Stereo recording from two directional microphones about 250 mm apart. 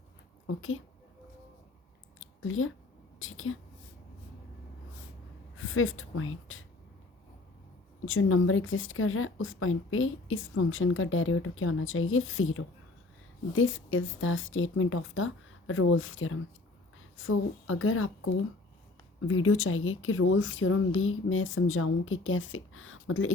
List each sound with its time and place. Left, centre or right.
0.4 s a woman's voice: left
2.2 s a sound: left
3.2 s a woman's voice: left
5.5 s speech: left
8.0 s a woman's voice: left
19.3 s speech: left